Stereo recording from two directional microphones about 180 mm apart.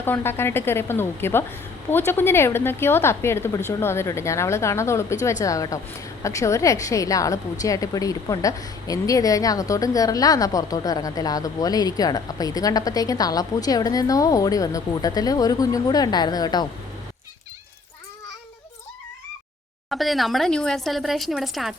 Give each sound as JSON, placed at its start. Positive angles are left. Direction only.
{"t": 0.0, "sound": "a woman's voice", "side_deg": 10}
{"t": 19.9, "sound": "speech", "side_deg": 0}